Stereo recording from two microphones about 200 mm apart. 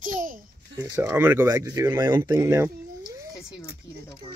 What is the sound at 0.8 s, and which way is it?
Speech, 15° right (ahead or behind).